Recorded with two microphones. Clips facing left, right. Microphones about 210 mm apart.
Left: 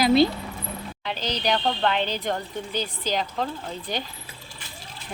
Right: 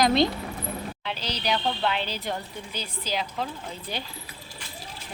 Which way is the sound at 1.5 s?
5° right (ahead or behind).